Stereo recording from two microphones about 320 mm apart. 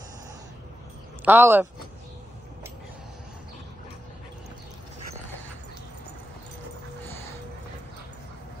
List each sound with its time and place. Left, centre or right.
1.2 s speech: centre